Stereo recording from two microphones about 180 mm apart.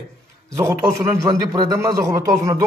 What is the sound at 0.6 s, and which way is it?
A man's voice, 15° right (ahead or behind).